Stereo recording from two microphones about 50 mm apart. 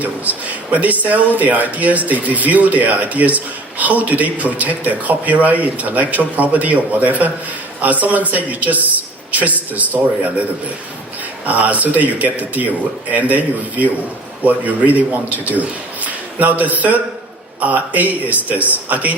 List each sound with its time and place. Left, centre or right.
0.0 s speech: right
11.4 s speech: right